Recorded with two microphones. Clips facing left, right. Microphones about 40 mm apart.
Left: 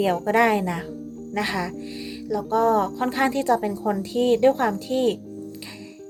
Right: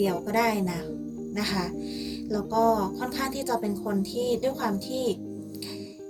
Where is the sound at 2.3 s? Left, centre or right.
Left.